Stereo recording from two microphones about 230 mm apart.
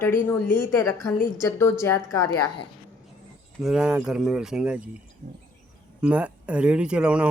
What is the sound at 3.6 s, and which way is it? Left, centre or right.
Speech, centre.